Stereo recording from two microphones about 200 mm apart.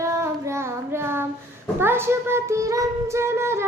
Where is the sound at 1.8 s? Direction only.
10° right (ahead or behind).